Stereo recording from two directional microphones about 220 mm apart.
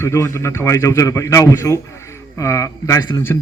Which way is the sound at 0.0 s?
10° left (ahead or behind).